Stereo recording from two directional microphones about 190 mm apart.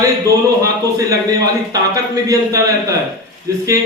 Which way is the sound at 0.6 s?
20° right (ahead or behind).